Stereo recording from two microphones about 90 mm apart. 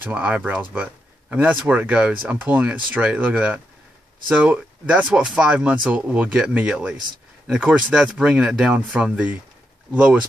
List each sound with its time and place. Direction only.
0.0 s speech: 15° right (ahead or behind)